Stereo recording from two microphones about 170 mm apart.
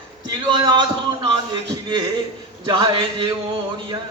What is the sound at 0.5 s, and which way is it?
Speech, 25° right (ahead or behind).